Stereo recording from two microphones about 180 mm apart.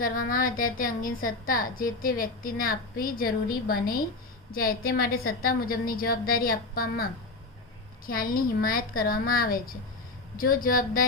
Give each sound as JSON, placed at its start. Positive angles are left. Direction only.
{"t": 0.0, "sound": "a woman's voice", "side_deg": 50}